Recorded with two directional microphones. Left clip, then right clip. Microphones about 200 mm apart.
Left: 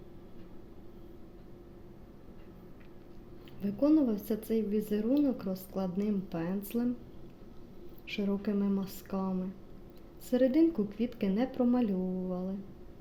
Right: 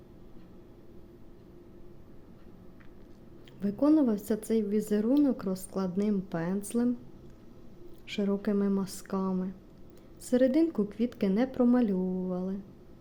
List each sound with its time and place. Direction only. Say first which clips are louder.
3.6 s a woman's voice: right 2 dB; 20° right (ahead or behind)
8.0 s a woman's voice: right 3 dB; 20° right (ahead or behind)